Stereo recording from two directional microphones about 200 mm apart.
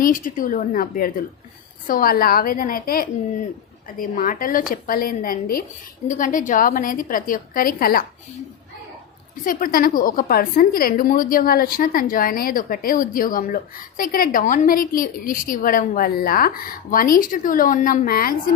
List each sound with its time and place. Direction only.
0.0 s a woman's voice: 45° left (ahead or behind)
9.3 s a woman's voice: 45° left (ahead or behind)